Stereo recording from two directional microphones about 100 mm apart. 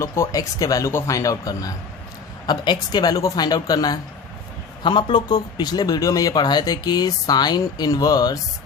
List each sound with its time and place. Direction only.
0.0 s speech: 30° left (ahead or behind)